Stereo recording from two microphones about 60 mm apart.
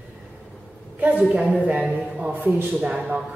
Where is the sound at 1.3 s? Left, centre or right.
Centre.